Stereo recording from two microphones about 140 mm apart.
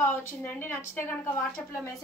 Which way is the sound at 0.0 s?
15° left (ahead or behind).